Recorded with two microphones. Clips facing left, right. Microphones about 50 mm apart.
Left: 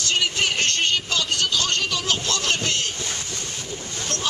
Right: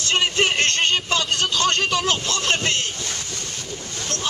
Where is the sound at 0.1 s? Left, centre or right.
Right.